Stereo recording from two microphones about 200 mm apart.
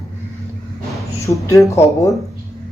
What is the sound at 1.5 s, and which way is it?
Speech, 15° left (ahead or behind).